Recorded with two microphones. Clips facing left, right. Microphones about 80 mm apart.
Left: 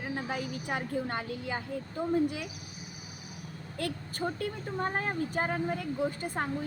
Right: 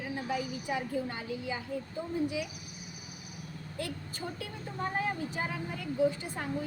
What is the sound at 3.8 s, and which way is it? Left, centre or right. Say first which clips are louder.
Speech: left 5 dB; left.